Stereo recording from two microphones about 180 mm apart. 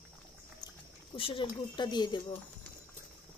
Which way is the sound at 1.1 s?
30° left (ahead or behind).